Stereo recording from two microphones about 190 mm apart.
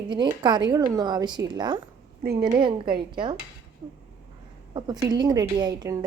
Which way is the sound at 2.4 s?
25° right (ahead or behind).